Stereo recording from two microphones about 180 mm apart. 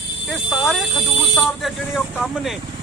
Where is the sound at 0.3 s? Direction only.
Centre (ahead or behind).